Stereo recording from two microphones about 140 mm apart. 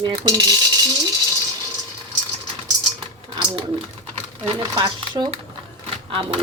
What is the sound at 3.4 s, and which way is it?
Speech, 35° right (ahead or behind).